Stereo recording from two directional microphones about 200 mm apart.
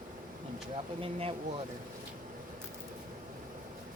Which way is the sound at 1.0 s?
30° right (ahead or behind).